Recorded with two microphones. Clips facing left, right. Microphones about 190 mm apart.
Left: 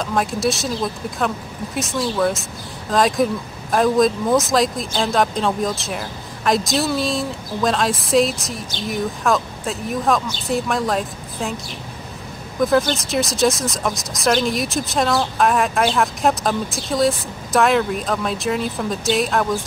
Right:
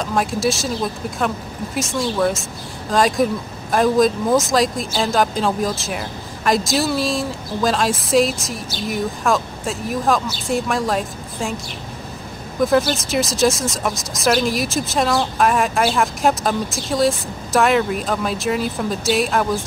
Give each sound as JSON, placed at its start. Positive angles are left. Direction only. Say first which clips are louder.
{"t": 0.0, "sound": "speech", "louder": "right 1 dB", "side_deg": 0}
{"t": 12.5, "sound": "speech", "louder": "right 1 dB", "side_deg": 0}